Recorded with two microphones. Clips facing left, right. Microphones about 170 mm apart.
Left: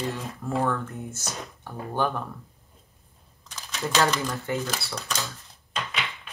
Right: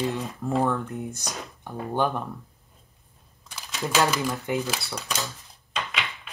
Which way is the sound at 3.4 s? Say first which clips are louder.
Even; 10° right (ahead or behind).